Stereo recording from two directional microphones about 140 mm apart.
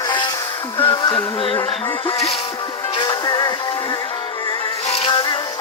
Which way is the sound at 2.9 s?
30° left (ahead or behind).